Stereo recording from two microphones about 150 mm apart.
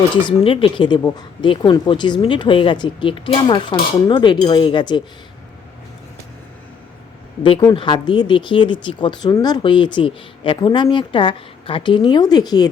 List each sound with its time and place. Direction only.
0.3 s speech: 35° left (ahead or behind)
7.7 s speech: 30° left (ahead or behind)